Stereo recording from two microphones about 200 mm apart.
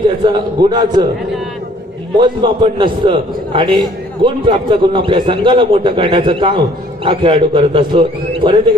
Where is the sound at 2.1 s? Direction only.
25° right (ahead or behind).